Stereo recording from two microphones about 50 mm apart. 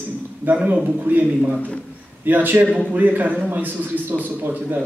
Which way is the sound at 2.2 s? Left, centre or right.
Right.